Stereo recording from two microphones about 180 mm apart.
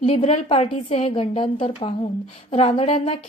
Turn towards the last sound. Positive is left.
turn(degrees=35)  # may be behind; listen again after turning